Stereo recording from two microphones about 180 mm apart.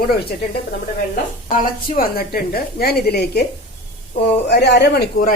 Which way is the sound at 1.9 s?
55° left (ahead or behind).